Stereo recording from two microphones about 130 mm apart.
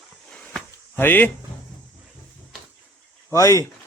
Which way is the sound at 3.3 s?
25° left (ahead or behind).